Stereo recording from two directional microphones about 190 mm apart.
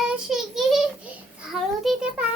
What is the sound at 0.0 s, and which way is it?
Child singing, centre (ahead or behind).